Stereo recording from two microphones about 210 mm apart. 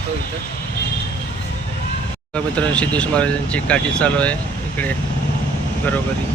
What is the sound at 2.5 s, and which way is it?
Speech, 5° left (ahead or behind).